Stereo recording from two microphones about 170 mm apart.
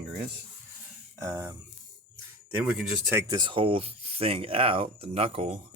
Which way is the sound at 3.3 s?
30° right (ahead or behind).